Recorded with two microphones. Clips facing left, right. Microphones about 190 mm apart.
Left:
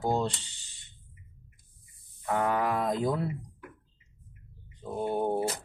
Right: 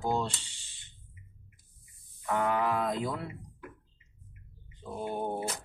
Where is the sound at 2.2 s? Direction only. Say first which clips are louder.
Left 1 dB; 40° left (ahead or behind).